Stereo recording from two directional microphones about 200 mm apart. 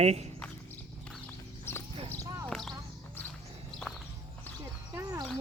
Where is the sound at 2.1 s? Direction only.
15° right (ahead or behind).